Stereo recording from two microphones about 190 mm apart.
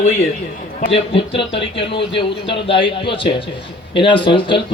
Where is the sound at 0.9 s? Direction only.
30° left (ahead or behind).